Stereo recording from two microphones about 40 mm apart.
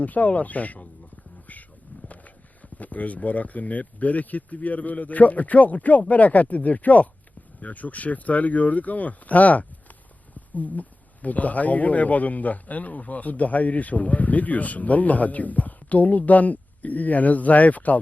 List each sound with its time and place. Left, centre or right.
0.0 s speech: left
2.7 s speech: left